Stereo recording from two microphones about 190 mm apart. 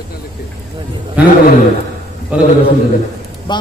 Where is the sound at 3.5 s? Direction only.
25° left (ahead or behind).